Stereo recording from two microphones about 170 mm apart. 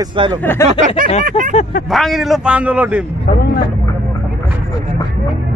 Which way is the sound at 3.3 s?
65° left (ahead or behind).